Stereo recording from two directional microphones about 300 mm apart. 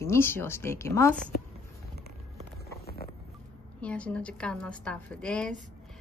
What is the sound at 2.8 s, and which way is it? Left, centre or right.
Music, left.